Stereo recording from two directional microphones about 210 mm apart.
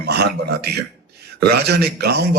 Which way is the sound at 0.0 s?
50° right (ahead or behind).